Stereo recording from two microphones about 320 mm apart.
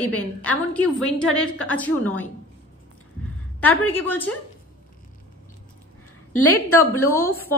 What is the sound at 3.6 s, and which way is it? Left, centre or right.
Speech, centre.